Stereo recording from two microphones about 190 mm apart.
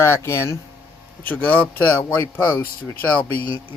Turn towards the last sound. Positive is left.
turn(degrees=10)  # may be behind; listen again after turning